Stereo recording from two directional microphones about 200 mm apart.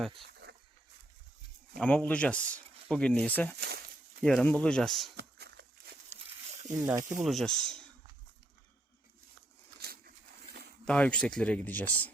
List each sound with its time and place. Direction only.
1.8 s speech: 5° left (ahead or behind)
5.1 s a sound: 55° right (ahead or behind)
6.1 s a sound: 35° right (ahead or behind)
6.7 s speech: 15° right (ahead or behind)
7.3 s speech: centre (ahead or behind)
10.8 s speech: 5° left (ahead or behind)